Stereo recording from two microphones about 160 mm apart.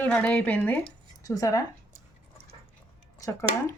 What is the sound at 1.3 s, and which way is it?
Speech, 20° left (ahead or behind).